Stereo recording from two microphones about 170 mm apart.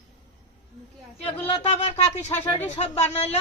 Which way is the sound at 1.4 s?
35° left (ahead or behind).